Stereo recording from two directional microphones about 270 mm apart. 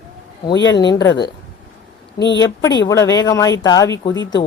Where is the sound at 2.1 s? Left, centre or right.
Left.